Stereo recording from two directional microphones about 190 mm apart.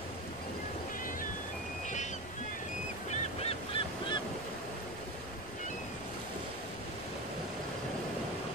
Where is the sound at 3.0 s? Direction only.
30° left (ahead or behind).